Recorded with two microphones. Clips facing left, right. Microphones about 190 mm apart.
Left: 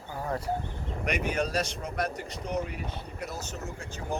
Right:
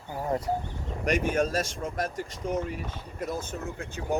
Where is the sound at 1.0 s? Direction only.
45° right (ahead or behind).